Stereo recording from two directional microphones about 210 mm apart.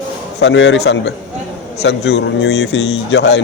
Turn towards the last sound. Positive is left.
turn(degrees=55)  # may be behind; listen again after turning